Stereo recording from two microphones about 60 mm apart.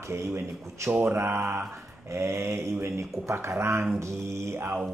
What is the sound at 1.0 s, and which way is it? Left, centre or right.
Speech, right.